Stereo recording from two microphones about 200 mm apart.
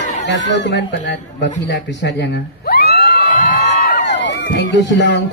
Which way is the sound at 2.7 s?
50° left (ahead or behind).